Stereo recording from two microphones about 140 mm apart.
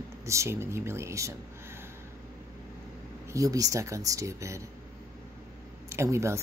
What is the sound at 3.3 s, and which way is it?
Speech, 25° right (ahead or behind).